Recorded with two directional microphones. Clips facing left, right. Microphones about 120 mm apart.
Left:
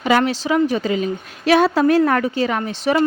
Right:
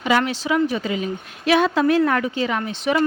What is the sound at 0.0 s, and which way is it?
Speech, 45° left (ahead or behind).